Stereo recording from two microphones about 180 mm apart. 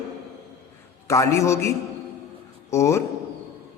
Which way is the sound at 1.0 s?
15° left (ahead or behind).